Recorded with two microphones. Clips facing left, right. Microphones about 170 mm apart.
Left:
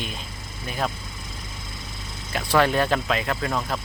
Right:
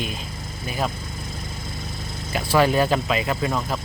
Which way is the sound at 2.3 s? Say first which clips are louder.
Right 2 dB; 5° right (ahead or behind).